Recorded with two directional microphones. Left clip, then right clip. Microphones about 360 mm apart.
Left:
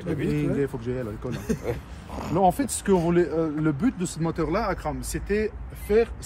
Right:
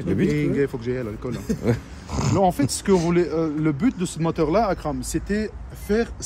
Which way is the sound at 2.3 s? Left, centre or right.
Centre.